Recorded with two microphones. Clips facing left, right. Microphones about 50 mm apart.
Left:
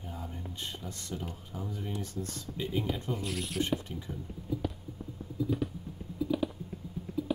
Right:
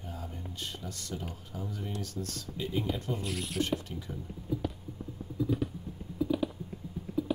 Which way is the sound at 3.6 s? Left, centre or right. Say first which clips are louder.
Even; centre.